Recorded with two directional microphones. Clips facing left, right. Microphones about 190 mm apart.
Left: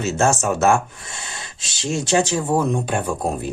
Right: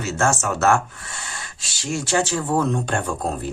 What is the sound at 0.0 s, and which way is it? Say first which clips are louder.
Speech: left 3 dB; 20° left (ahead or behind).